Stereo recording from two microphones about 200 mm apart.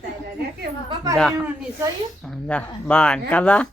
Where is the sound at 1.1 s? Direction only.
Centre (ahead or behind).